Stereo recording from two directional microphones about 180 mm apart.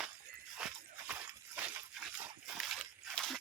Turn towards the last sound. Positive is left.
turn(degrees=0)  # may be behind; listen again after turning